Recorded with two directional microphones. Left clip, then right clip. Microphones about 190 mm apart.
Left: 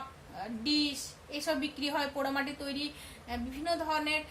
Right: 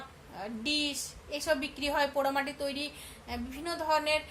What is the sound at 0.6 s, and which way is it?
A woman's voice, 50° right (ahead or behind).